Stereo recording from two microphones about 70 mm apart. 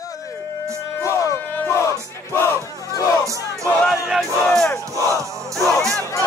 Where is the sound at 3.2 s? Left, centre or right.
Right.